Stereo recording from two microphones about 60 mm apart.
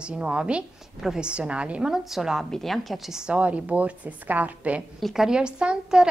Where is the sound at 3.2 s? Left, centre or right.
Right.